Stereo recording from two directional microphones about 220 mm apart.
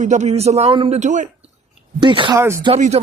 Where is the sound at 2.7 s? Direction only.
30° right (ahead or behind).